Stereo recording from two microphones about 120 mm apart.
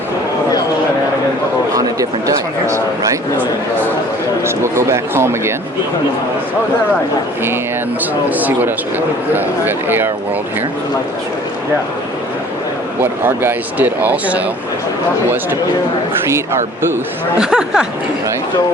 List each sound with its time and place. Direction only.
1.7 s a sound: 30° right (ahead or behind)
4.4 s speech: 20° right (ahead or behind)
8.3 s speech: 15° right (ahead or behind)
13.0 s speech: 15° right (ahead or behind)
17.3 s speech: 5° right (ahead or behind)